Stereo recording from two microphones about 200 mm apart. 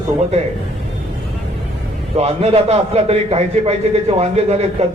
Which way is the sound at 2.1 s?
30° right (ahead or behind).